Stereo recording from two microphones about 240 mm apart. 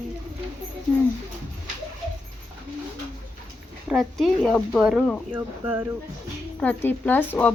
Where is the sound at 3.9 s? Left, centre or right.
Centre.